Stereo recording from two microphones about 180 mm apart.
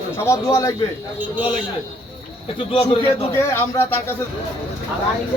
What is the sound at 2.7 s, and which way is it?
Speech, 30° left (ahead or behind).